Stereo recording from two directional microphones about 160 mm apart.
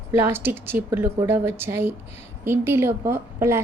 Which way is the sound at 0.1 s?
15° right (ahead or behind).